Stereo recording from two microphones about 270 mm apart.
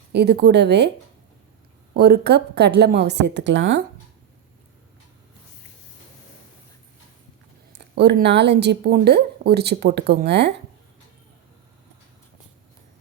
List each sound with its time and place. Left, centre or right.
0.1 s a woman's voice: right
1.9 s a woman's voice: right
7.9 s a woman's voice: right